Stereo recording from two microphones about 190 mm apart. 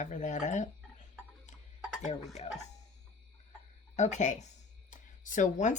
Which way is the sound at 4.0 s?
40° left (ahead or behind).